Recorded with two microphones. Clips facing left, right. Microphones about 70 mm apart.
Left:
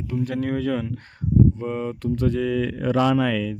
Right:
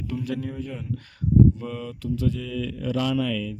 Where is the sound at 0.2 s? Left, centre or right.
Left.